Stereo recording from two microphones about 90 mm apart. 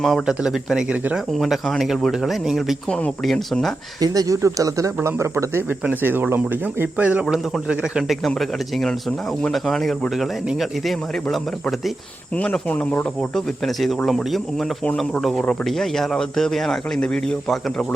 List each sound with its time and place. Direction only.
0.3 s speech: 5° right (ahead or behind)
4.0 s speech: 45° right (ahead or behind)
5.8 s a man's voice: 20° right (ahead or behind); by 11.3 s centre (ahead or behind)
12.4 s speech: 15° left (ahead or behind)
13.8 s speech: centre (ahead or behind)